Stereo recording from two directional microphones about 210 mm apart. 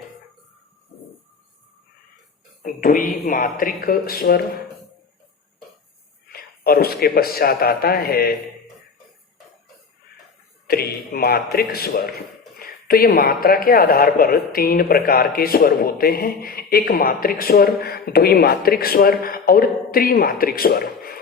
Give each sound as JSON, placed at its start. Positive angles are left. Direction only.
{"t": 2.6, "sound": "a woman's voice", "side_deg": 40}
{"t": 6.2, "sound": "a man's voice", "side_deg": 50}
{"t": 10.7, "sound": "speech", "side_deg": 45}